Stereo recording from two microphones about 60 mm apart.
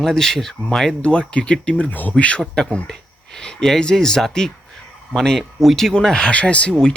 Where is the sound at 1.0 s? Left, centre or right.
Centre.